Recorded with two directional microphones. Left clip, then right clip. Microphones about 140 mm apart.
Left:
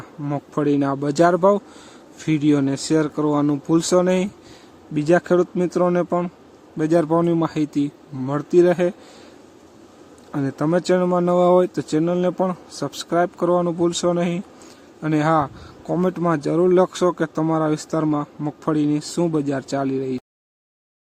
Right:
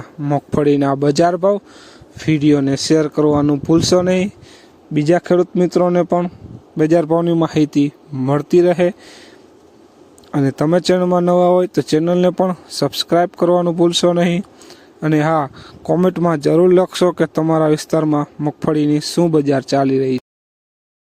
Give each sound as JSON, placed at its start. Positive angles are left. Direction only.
{"t": 0.0, "sound": "a sound", "side_deg": -45}
{"t": 0.5, "sound": "speech", "side_deg": -55}
{"t": 10.3, "sound": "speech", "side_deg": -55}